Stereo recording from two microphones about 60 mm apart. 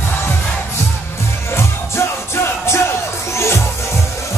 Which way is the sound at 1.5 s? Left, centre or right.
Left.